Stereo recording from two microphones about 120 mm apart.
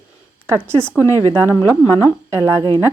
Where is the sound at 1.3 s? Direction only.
25° right (ahead or behind).